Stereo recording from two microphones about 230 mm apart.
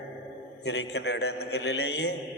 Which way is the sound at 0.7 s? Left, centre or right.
Left.